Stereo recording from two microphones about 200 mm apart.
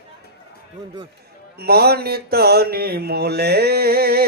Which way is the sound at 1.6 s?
50° right (ahead or behind).